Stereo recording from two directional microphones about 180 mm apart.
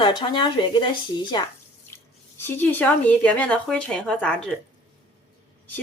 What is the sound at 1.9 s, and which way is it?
Speech, 10° left (ahead or behind).